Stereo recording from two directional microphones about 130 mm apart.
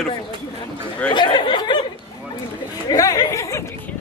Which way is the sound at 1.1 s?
40° left (ahead or behind).